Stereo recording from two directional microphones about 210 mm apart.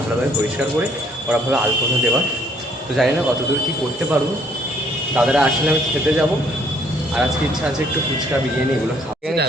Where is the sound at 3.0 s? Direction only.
Centre (ahead or behind).